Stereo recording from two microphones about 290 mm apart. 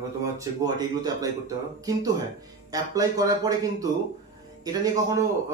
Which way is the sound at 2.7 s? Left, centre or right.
Centre.